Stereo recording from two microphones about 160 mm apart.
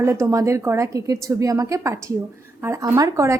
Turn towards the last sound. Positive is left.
turn(degrees=-20)  # may be behind; listen again after turning